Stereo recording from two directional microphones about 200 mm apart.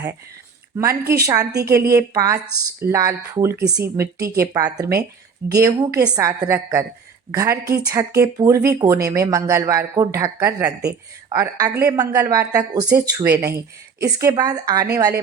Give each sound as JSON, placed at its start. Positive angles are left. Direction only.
{"t": 0.8, "sound": "speech", "side_deg": -15}
{"t": 2.5, "sound": "speech", "side_deg": 45}
{"t": 2.8, "sound": "speech", "side_deg": -15}
{"t": 13.3, "sound": "speech", "side_deg": -50}
{"t": 14.0, "sound": "speech", "side_deg": -15}